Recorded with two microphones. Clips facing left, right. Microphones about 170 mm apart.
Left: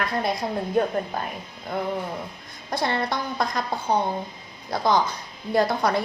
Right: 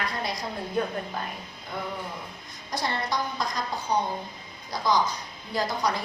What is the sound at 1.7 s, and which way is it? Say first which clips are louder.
A woman's voice: left 7 dB; 60° left (ahead or behind).